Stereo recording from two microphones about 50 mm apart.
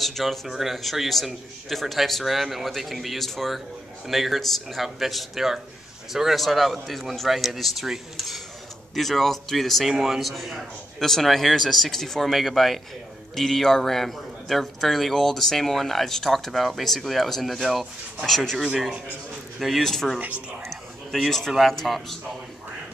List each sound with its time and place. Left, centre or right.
0.0 s a man's voice: centre
19.6 s a man's voice: centre
20.2 s speech: right
20.7 s a man's voice: centre